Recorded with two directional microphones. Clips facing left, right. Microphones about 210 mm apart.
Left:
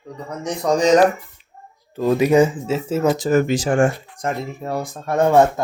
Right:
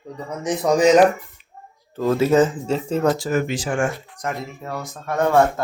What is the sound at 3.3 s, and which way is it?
Speech, 40° left (ahead or behind).